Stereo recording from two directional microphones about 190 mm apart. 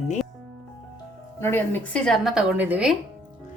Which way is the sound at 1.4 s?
10° left (ahead or behind).